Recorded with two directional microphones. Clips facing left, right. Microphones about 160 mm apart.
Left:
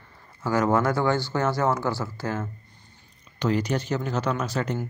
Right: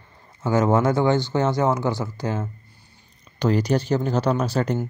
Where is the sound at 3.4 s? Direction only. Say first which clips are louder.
Right 4 dB; 35° right (ahead or behind).